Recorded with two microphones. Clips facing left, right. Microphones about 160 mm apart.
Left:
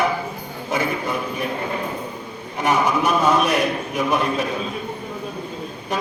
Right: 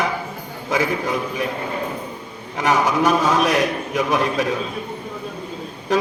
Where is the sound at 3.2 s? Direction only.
90° right.